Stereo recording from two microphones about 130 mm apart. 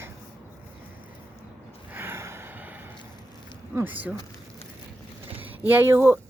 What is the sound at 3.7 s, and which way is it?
Speech, 15° right (ahead or behind).